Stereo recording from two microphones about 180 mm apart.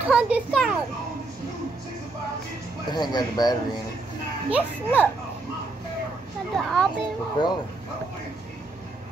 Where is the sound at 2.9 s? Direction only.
25° left (ahead or behind).